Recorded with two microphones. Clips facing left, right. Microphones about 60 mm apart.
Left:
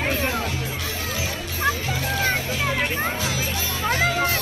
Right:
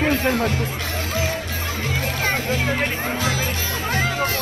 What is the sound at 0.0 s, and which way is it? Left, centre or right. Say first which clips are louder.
Music: right 5 dB; right.